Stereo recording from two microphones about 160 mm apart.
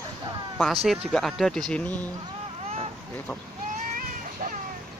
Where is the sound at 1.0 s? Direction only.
5° left (ahead or behind).